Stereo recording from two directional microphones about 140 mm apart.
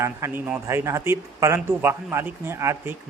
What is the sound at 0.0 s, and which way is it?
Speech, 15° right (ahead or behind).